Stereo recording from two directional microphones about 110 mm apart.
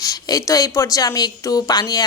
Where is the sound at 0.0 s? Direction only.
35° left (ahead or behind).